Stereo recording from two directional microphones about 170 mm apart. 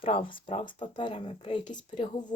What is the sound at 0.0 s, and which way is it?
A woman's voice, 30° left (ahead or behind).